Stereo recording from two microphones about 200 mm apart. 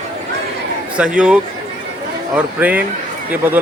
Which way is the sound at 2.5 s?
10° right (ahead or behind).